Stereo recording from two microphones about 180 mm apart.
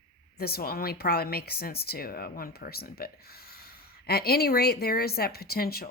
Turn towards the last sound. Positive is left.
turn(degrees=55)  # may be behind; listen again after turning